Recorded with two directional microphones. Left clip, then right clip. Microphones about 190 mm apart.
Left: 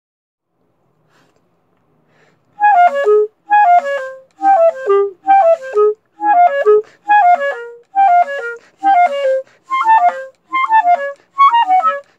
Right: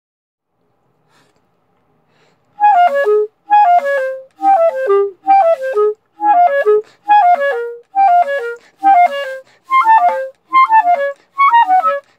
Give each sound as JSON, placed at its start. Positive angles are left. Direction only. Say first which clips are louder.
{"t": 2.5, "sound": "music", "louder": "even", "side_deg": -35}
{"t": 8.5, "sound": "music", "louder": "left 2 dB", "side_deg": 0}
{"t": 8.8, "sound": "music", "louder": "right 1 dB", "side_deg": -35}